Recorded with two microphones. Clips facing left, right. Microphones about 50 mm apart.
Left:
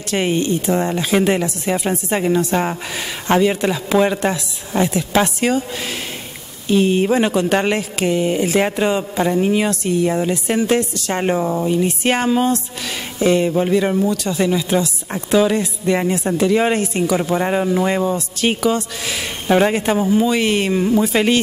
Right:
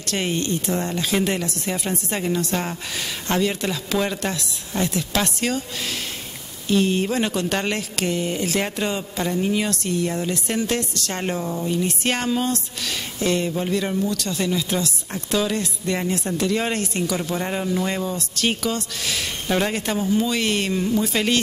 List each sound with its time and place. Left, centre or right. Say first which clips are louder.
0.1 s speech: left 6 dB; centre
6.7 s speech: left 5 dB; centre
11.7 s speech: left 3 dB; centre